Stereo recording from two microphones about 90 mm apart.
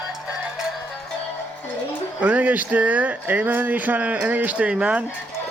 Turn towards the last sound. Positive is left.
turn(degrees=-10)  # may be behind; listen again after turning